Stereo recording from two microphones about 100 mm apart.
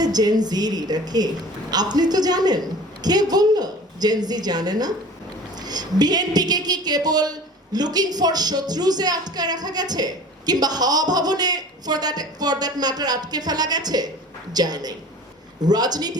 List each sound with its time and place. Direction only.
0.0 s a woman's voice: 40° right (ahead or behind)